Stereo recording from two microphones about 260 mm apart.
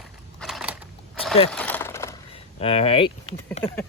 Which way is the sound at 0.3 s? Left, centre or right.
Centre.